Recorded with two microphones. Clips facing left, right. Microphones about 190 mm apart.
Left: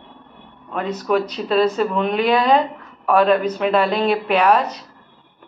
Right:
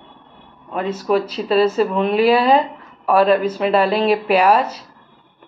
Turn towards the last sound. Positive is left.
turn(degrees=-10)  # may be behind; listen again after turning